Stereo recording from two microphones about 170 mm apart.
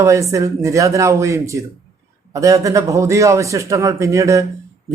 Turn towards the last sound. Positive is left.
turn(degrees=-20)  # may be behind; listen again after turning